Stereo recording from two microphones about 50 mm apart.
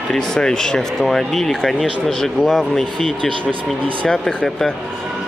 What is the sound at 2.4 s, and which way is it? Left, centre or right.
Speech, centre.